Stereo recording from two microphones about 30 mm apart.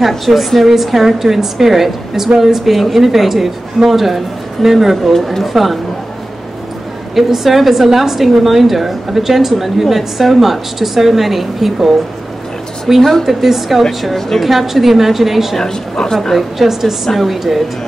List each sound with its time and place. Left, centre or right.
0.2 s a woman's voice: centre
7.2 s a woman's voice: centre
15.5 s speech: centre
16.2 s a woman's voice: centre